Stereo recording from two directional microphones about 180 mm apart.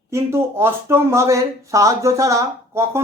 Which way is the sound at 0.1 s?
15° right (ahead or behind).